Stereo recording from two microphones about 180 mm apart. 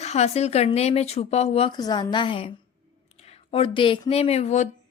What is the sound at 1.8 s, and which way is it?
A woman's voice, 20° left (ahead or behind).